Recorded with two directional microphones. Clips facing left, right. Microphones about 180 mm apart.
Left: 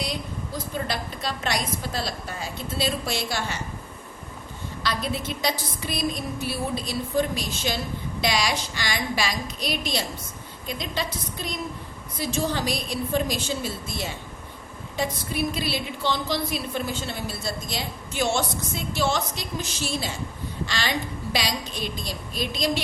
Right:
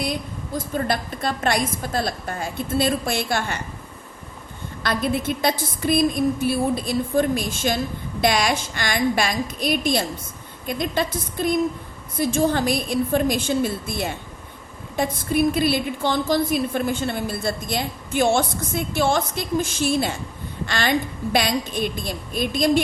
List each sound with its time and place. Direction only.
0.0 s a woman's voice: 50° right (ahead or behind)
4.8 s a woman's voice: 55° right (ahead or behind)